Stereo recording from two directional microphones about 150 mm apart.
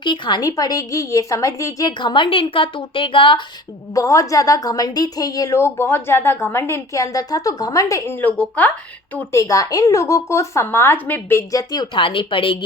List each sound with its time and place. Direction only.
0.0 s a woman's voice: 30° left (ahead or behind)
3.9 s a woman's voice: 20° left (ahead or behind)